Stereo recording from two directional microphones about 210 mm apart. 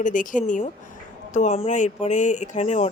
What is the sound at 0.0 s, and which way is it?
A woman's voice, 40° left (ahead or behind).